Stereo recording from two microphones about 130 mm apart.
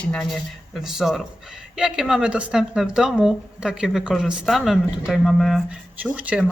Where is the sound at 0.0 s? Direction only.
5° left (ahead or behind).